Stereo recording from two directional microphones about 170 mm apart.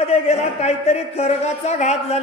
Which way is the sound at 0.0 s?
40° left (ahead or behind).